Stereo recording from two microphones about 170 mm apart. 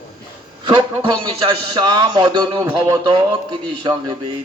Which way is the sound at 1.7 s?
25° right (ahead or behind).